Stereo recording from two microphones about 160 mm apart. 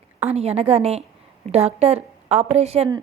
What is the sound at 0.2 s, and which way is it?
A woman's voice, 40° right (ahead or behind).